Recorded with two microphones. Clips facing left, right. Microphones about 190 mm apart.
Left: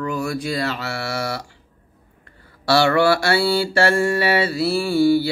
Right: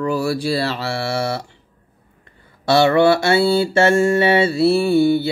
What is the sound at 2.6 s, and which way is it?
Mantra, 20° right (ahead or behind).